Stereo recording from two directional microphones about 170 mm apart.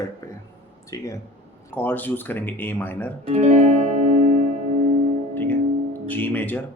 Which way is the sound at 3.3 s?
40° right (ahead or behind).